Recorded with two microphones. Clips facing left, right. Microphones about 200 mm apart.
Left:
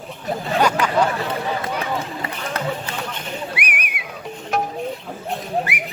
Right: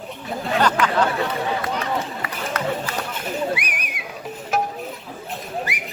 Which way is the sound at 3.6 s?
60° left (ahead or behind).